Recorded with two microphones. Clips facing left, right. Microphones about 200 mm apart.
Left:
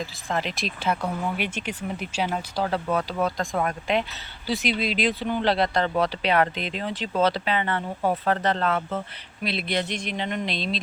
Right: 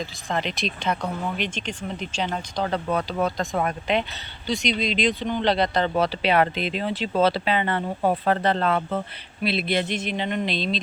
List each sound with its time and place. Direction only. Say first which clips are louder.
0.0 s speech: right 1 dB; 5° left (ahead or behind)
6.1 s speech: right 2 dB; 25° right (ahead or behind)
7.5 s speech: right 2 dB; 20° right (ahead or behind)
8.1 s speech: right 1 dB; 30° right (ahead or behind)
9.5 s speech: right 3 dB; 5° right (ahead or behind)